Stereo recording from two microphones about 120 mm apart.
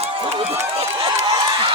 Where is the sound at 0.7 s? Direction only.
55° right (ahead or behind).